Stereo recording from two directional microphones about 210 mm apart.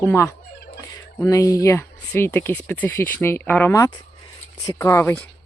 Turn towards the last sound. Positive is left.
turn(degrees=10)  # may be behind; listen again after turning